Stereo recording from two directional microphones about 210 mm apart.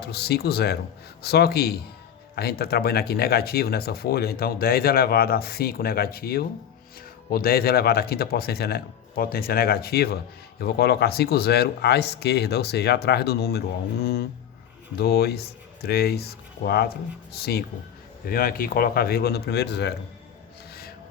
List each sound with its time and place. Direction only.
0.0 s speech: 50° left (ahead or behind)